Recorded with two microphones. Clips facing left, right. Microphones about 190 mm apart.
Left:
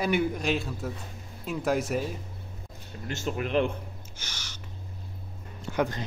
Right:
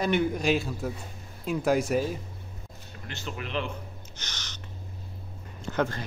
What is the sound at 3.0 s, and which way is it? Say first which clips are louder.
Speech: left 6 dB; 45° left (ahead or behind).